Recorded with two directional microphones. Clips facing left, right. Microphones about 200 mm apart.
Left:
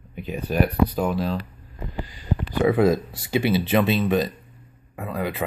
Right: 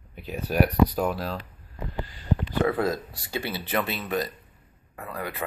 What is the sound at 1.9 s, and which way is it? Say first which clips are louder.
Speech: even; 10° left (ahead or behind).